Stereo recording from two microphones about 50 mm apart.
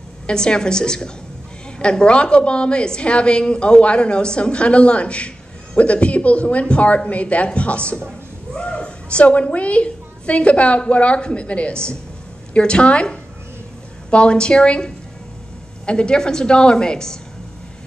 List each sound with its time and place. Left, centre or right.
0.3 s a woman's voice: centre